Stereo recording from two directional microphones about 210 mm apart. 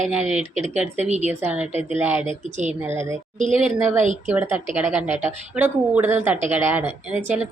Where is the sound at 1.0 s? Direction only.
30° right (ahead or behind).